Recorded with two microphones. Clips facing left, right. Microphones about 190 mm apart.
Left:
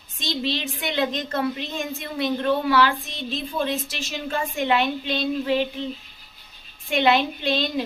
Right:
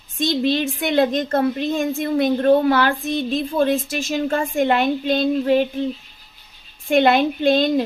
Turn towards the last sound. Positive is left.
turn(degrees=-50)  # may be behind; listen again after turning